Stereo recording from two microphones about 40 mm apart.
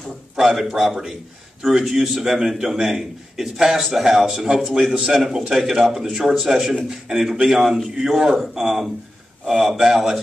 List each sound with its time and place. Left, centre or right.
0.4 s a man's voice: centre